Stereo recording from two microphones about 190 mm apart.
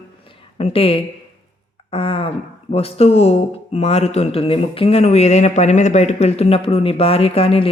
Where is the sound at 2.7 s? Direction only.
30° left (ahead or behind).